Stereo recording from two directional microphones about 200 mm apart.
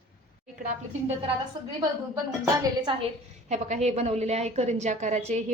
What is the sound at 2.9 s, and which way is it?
A woman's voice, 25° right (ahead or behind).